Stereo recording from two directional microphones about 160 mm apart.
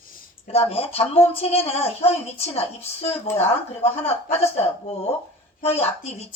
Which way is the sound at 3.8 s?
40° left (ahead or behind).